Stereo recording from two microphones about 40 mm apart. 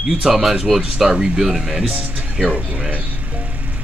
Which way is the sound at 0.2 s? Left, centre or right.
Centre.